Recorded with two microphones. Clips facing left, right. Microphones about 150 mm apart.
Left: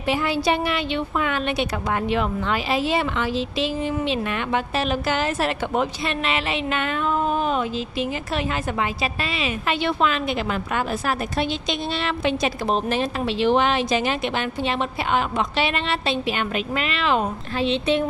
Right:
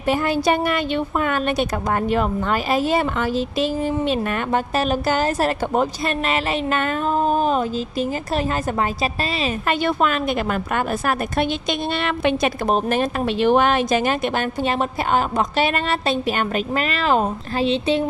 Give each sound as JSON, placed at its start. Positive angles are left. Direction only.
{"t": 0.0, "sound": "a woman's voice", "side_deg": -45}